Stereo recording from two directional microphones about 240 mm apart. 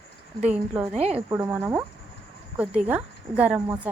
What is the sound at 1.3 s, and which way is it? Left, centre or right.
A woman's voice, centre.